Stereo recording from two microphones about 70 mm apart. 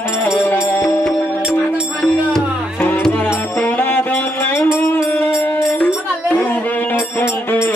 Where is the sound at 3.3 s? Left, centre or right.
Left.